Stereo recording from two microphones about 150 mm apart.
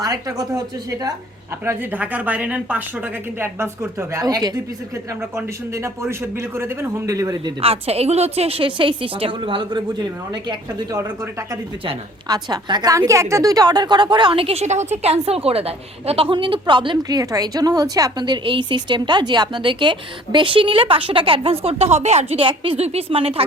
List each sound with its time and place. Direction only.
0.0 s a man's voice: 25° right (ahead or behind)
1.6 s speech: 15° right (ahead or behind)
4.1 s a man's voice: 25° right (ahead or behind)
7.6 s a woman's voice: 40° right (ahead or behind)
12.3 s a man's voice: 30° right (ahead or behind)